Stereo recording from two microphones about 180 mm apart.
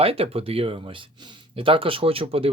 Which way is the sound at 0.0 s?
30° right (ahead or behind).